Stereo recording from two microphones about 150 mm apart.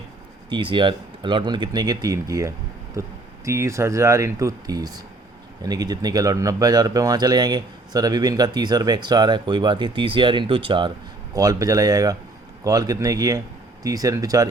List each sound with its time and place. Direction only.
0.5 s speech: 35° right (ahead or behind)